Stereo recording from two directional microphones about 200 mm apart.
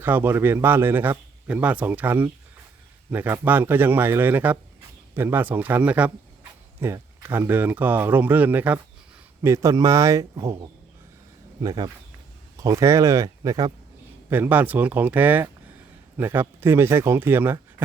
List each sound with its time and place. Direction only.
0.0 s a man's voice: 10° right (ahead or behind)